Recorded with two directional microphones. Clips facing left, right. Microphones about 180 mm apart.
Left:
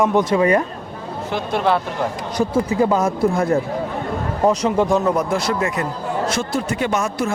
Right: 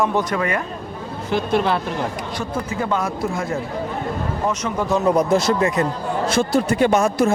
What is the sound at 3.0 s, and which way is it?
Speech, 45° left (ahead or behind).